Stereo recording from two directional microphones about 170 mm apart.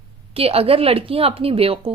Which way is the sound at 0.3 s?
35° right (ahead or behind).